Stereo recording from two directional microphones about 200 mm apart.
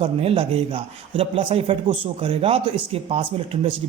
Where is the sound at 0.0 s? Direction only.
30° right (ahead or behind).